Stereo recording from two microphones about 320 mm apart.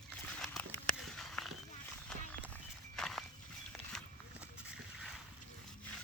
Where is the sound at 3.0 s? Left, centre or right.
Centre.